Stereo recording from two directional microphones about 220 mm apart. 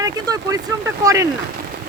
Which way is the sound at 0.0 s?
15° right (ahead or behind).